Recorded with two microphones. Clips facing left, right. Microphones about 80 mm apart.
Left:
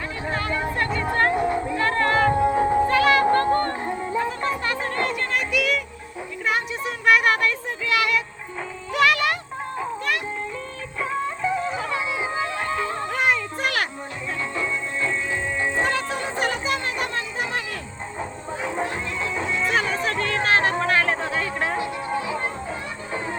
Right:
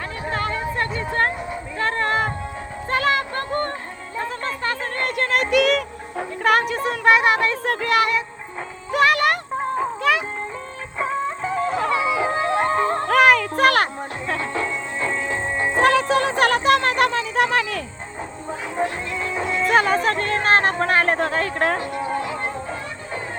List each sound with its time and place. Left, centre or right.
1.7 s music: right
3.2 s a sound: left
5.0 s music: right
6.8 s music: right
7.7 s child singing: right
8.9 s music: right
11.0 s music: right
11.7 s music: right
12.4 s music: right
13.1 s music: right
15.0 s music: right
15.7 s music: right
19.6 s music: right
21.2 s a sound: right